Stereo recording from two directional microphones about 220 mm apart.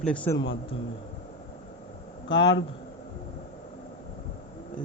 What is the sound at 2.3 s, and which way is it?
Speech, 20° left (ahead or behind).